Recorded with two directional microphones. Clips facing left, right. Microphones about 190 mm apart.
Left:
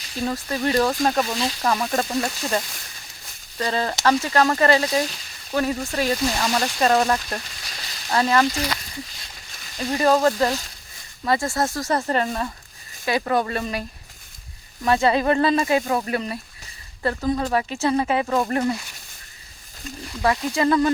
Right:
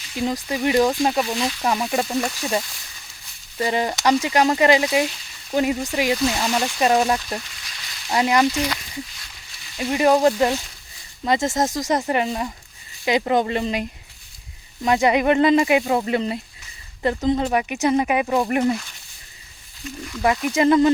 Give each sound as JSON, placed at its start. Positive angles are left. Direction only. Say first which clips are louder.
{"t": 0.2, "sound": "speech", "louder": "right 2 dB", "side_deg": -15}
{"t": 3.6, "sound": "speech", "louder": "right 2 dB", "side_deg": -15}
{"t": 9.7, "sound": "speech", "louder": "right 2 dB", "side_deg": -15}
{"t": 14.8, "sound": "speech", "louder": "right 1 dB", "side_deg": -15}
{"t": 20.2, "sound": "speech", "louder": "right 3 dB", "side_deg": -20}